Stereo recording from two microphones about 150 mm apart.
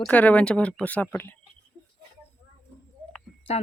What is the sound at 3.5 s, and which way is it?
Speech, 45° left (ahead or behind).